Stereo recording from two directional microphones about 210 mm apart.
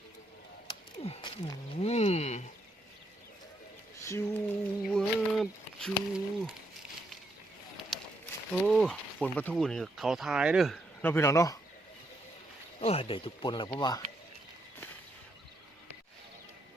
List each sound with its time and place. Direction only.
1.0 s speech: 25° left (ahead or behind)
4.0 s a sound: 15° left (ahead or behind)
4.8 s a sound: centre (ahead or behind)
8.6 s speech: centre (ahead or behind)
11.0 s speech: 10° left (ahead or behind)
12.8 s speech: 25° left (ahead or behind)